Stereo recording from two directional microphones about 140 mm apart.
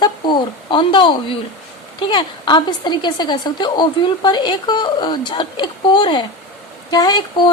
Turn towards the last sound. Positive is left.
turn(degrees=30)  # may be behind; listen again after turning